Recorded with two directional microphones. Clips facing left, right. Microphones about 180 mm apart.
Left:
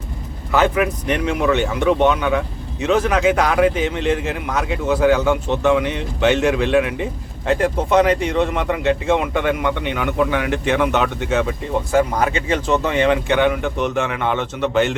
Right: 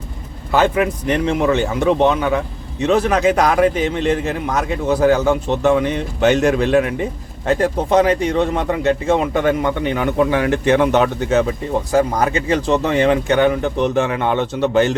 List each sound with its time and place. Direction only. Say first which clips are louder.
0.5 s a man's voice: right 1 dB; 30° right (ahead or behind)